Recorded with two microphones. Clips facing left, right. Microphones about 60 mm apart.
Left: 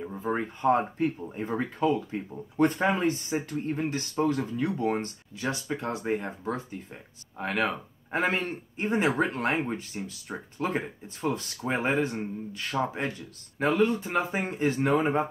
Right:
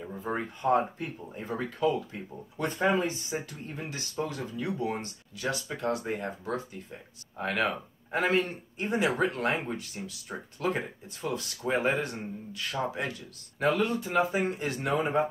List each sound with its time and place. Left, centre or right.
0.2 s speech: left
5.4 s speech: left
7.3 s speech: centre
7.6 s speech: left